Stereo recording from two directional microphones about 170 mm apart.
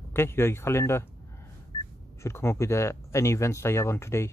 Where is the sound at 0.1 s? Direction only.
15° left (ahead or behind).